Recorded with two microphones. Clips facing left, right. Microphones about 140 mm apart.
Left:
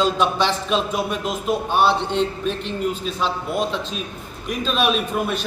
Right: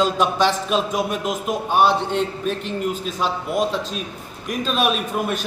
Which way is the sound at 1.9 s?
50° right (ahead or behind).